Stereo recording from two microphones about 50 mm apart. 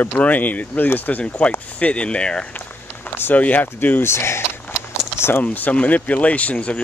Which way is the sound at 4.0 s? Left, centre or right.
Left.